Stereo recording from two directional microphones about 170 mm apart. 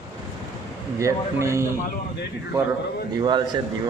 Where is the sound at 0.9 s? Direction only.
15° right (ahead or behind).